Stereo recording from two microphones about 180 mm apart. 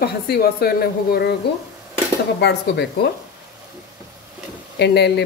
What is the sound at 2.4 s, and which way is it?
Speech, 70° left (ahead or behind).